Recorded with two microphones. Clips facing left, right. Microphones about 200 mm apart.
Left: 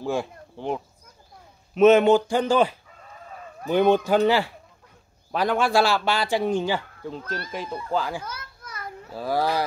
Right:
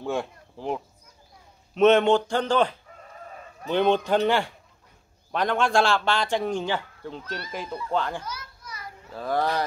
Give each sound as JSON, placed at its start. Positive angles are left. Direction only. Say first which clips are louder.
{"t": 0.0, "sound": "a man's voice", "louder": "left 2 dB", "side_deg": 0}
{"t": 8.2, "sound": "children playing", "louder": "left 1 dB", "side_deg": 55}
{"t": 9.1, "sound": "speech", "louder": "left 1 dB", "side_deg": 5}